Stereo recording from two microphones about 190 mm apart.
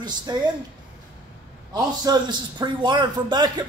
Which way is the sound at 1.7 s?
20° right (ahead or behind).